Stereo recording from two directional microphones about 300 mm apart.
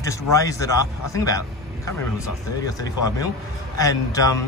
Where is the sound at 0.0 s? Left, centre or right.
Centre.